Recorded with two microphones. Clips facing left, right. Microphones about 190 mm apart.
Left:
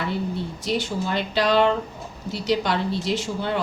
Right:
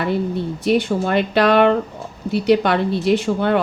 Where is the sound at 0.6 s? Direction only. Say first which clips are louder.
Right 9 dB; 60° right (ahead or behind).